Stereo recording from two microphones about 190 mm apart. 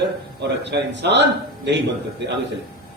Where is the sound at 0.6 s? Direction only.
65° right (ahead or behind).